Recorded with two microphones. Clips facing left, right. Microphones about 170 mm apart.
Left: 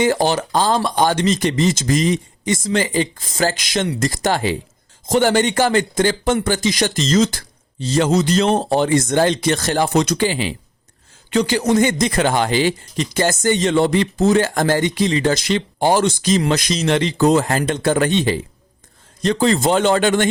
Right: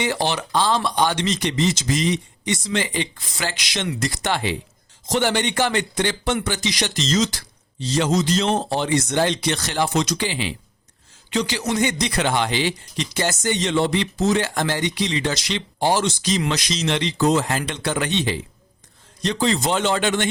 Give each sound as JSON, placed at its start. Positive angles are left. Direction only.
{"t": 0.0, "sound": "speech", "side_deg": 45}